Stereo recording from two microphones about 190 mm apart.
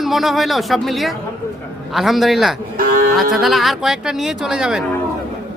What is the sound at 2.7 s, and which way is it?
Speech, 50° right (ahead or behind).